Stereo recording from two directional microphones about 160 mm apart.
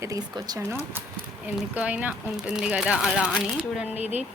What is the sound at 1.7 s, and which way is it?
Speech, 10° right (ahead or behind).